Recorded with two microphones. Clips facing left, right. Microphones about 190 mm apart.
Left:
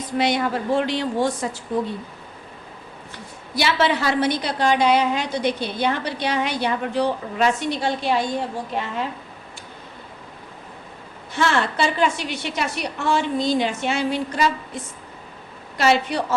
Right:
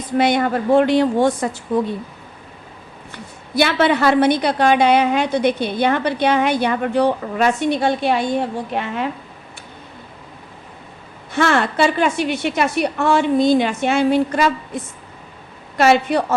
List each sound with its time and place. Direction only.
0.2 s a woman's voice: 55° right (ahead or behind)
3.5 s a woman's voice: 55° right (ahead or behind)
11.3 s a woman's voice: 55° right (ahead or behind)
15.8 s a woman's voice: 55° right (ahead or behind)